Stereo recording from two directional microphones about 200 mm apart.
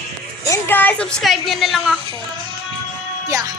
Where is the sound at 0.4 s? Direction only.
10° left (ahead or behind).